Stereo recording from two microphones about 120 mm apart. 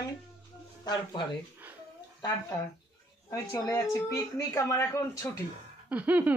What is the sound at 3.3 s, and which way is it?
Speech, 30° left (ahead or behind).